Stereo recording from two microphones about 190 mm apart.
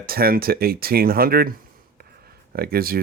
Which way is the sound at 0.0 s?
50° right (ahead or behind).